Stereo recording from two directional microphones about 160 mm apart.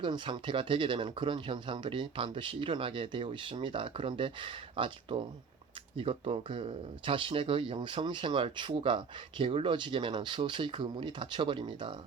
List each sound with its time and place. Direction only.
0.0 s speech: 30° right (ahead or behind)